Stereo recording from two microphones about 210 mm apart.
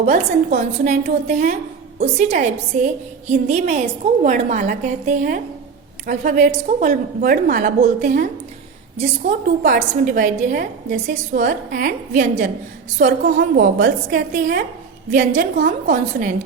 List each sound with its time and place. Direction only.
0.0 s a woman's voice: 35° right (ahead or behind)